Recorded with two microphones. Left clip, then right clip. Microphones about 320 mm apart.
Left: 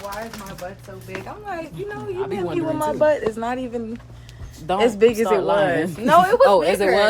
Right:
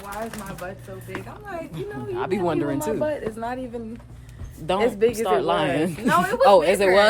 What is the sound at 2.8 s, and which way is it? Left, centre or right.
Speech, left.